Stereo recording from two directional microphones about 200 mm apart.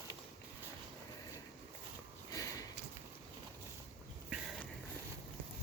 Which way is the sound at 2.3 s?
15° left (ahead or behind).